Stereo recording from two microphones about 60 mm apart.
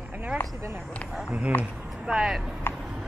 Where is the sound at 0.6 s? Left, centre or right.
Right.